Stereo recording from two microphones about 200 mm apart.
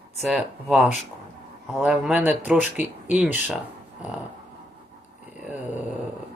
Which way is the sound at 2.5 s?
35° left (ahead or behind).